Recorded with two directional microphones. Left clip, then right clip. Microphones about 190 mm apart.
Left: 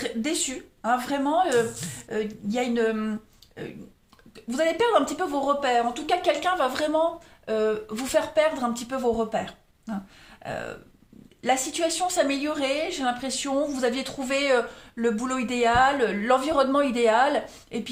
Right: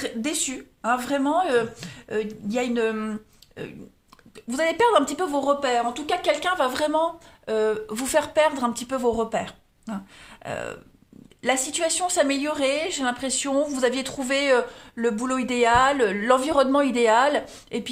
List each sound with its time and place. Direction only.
0.0 s a woman's voice: 30° right (ahead or behind)
4.4 s a woman's voice: 35° right (ahead or behind)